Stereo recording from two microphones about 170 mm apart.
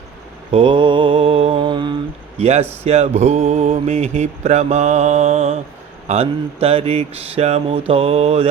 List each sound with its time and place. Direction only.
0.5 s mantra: 30° right (ahead or behind)
2.4 s mantra: 35° right (ahead or behind)